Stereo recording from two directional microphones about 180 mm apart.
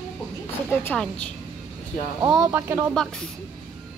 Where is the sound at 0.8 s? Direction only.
5° left (ahead or behind).